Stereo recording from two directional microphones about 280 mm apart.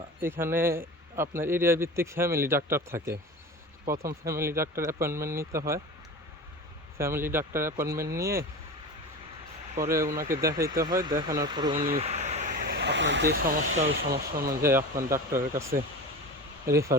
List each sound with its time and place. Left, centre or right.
0.2 s a man's voice: centre
7.0 s a man's voice: centre
9.8 s a man's voice: centre; by 14.5 s right
14.6 s a man's voice: centre